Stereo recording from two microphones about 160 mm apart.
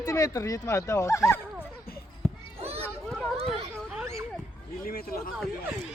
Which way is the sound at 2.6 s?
40° right (ahead or behind).